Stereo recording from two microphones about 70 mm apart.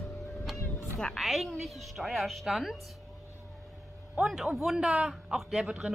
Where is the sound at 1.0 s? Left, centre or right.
Centre.